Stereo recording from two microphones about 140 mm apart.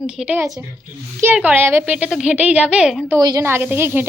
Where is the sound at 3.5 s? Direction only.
15° right (ahead or behind).